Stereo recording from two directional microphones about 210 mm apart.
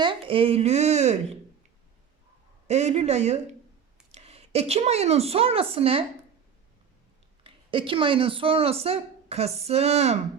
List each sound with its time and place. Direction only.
0.0 s speech: 25° right (ahead or behind)
2.6 s a woman's voice: 30° right (ahead or behind)
7.4 s speech: 25° right (ahead or behind)